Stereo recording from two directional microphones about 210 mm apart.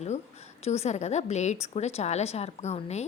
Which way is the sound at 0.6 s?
30° left (ahead or behind).